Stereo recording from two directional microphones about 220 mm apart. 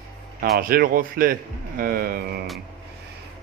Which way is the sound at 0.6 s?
40° right (ahead or behind).